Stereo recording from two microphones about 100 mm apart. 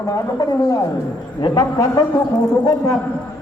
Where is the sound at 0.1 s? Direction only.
35° left (ahead or behind).